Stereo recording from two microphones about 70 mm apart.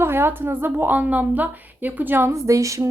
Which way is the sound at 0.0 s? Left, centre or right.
Right.